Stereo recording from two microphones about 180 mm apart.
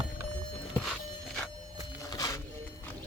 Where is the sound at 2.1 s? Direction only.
20° left (ahead or behind).